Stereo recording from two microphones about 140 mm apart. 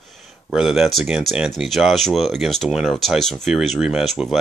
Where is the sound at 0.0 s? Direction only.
Centre (ahead or behind).